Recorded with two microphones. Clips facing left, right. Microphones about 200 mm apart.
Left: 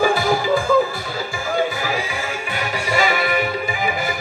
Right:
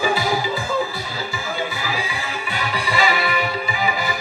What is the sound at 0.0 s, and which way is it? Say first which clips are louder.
Music: left 3 dB; 50° left (ahead or behind).